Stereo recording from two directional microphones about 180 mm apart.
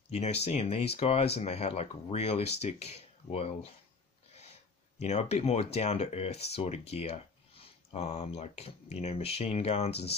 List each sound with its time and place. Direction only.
0.1 s speech: 35° left (ahead or behind)
5.0 s speech: 35° left (ahead or behind)